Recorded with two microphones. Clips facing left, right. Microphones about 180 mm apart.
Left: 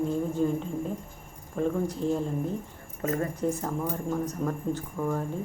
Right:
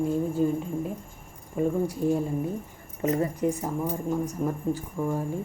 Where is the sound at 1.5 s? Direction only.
10° right (ahead or behind).